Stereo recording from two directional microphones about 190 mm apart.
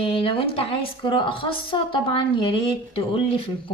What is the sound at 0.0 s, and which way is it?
A woman's voice, 30° left (ahead or behind).